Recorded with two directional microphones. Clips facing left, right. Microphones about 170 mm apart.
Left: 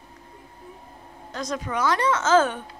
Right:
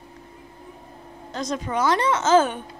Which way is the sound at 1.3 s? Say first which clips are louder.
Right 2 dB; 25° right (ahead or behind).